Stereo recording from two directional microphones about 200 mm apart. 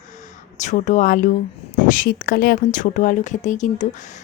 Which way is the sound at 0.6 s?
40° left (ahead or behind).